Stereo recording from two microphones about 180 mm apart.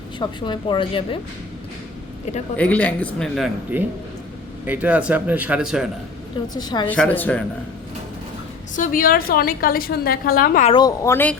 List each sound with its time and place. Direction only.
0.2 s a woman's voice: 25° left (ahead or behind)
2.6 s speech: 10° left (ahead or behind)
6.5 s a woman's voice: 25° left (ahead or behind)
6.8 s speech: 10° left (ahead or behind)
8.7 s a woman's voice: 50° left (ahead or behind)
10.7 s speech: 20° left (ahead or behind)